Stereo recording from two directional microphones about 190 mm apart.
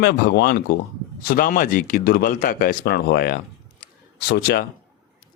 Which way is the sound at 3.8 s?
60° left (ahead or behind).